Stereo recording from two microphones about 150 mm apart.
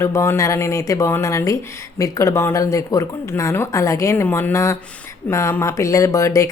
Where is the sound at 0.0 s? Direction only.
15° left (ahead or behind).